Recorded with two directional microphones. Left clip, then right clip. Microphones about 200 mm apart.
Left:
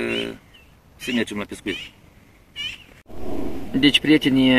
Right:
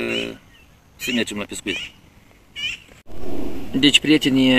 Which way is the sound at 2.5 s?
45° left (ahead or behind).